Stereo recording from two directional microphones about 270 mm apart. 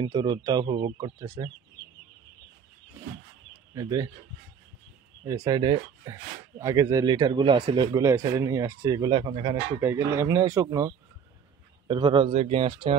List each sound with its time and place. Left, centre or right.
0.0 s speech: centre
3.7 s speech: centre
5.2 s speech: centre